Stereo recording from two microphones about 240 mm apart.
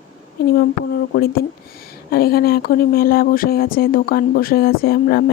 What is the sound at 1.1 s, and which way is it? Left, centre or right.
Speech, left.